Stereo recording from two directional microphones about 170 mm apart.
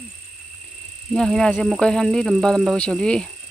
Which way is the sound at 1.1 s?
5° left (ahead or behind).